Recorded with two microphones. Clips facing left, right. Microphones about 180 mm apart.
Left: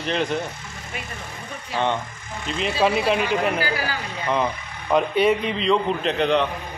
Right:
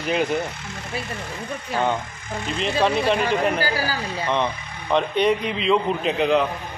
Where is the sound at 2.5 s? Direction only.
5° left (ahead or behind).